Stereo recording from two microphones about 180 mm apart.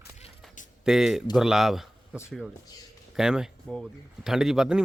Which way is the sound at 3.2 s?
5° right (ahead or behind).